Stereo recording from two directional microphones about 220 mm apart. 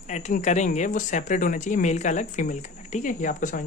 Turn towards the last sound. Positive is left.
turn(degrees=35)  # may be behind; listen again after turning